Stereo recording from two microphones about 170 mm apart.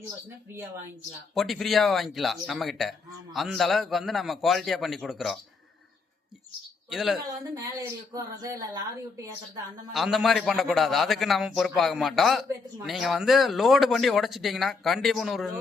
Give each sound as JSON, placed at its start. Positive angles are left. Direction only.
{"t": 1.3, "sound": "speech", "side_deg": 0}
{"t": 6.9, "sound": "speech", "side_deg": 0}
{"t": 7.5, "sound": "speech", "side_deg": -20}
{"t": 9.9, "sound": "speech", "side_deg": 0}